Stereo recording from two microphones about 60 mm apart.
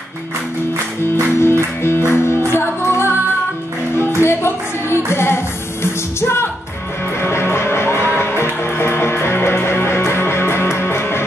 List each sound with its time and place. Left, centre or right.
1.4 s music: left